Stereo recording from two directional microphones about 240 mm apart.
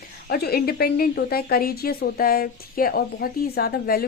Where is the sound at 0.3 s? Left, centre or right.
Left.